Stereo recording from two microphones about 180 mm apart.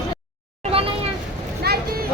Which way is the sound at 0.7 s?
30° right (ahead or behind).